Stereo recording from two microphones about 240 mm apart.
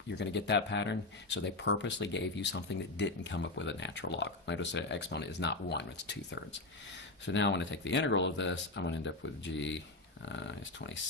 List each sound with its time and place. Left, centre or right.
0.2 s speech: left